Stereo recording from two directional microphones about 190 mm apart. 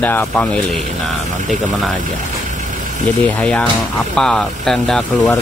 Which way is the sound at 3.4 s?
5° left (ahead or behind).